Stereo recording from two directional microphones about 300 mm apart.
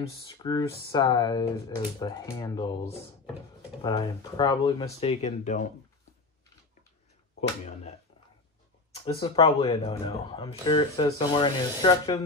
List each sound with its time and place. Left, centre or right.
0.0 s speech: centre
8.9 s speech: centre